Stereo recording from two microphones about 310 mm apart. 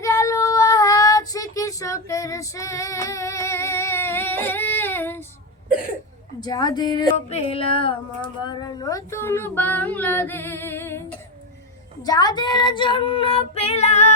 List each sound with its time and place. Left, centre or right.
0.0 s child singing: centre
6.4 s female singing: centre